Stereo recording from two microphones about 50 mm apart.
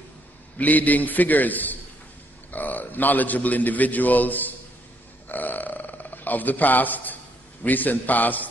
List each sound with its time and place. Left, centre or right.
0.6 s a man's voice: left
5.3 s burping: left
7.6 s a man's voice: left